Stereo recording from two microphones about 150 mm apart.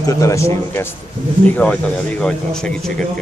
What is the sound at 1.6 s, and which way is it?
A man's voice, 5° left (ahead or behind).